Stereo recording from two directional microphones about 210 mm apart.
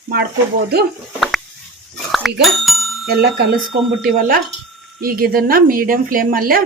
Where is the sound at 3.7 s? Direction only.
40° right (ahead or behind).